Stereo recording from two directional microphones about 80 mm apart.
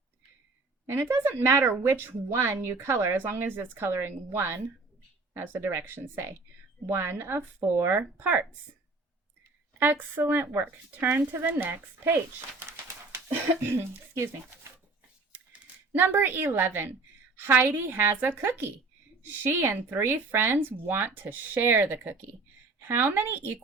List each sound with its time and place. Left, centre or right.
0.9 s speech: right
9.7 s speech: right
15.3 s a sound: centre
16.0 s speech: right